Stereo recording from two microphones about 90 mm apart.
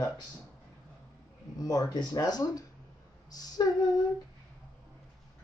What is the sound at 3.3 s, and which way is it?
Female singing, 45° left (ahead or behind).